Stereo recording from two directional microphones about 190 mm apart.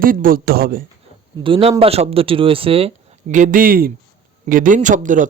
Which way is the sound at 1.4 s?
30° right (ahead or behind).